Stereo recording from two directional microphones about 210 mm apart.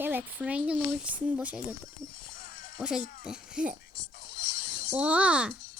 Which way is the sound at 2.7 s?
5° right (ahead or behind).